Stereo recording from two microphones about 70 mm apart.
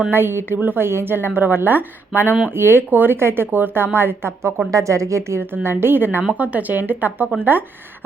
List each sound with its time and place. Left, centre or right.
0.1 s a woman's voice: right
4.7 s a woman's voice: right